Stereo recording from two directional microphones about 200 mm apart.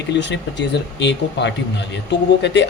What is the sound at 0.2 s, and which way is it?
Speech, 65° left (ahead or behind).